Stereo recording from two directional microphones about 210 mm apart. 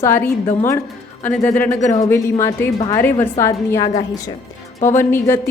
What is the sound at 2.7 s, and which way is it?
Speech, 25° left (ahead or behind).